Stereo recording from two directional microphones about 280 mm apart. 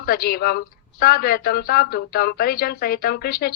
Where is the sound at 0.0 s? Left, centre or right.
Left.